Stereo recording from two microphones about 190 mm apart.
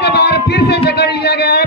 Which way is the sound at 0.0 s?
60° left (ahead or behind).